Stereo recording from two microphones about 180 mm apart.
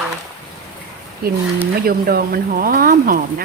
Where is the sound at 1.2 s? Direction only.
60° right (ahead or behind).